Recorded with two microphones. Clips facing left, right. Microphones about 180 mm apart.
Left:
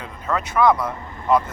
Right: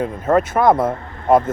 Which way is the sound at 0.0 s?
50° right (ahead or behind).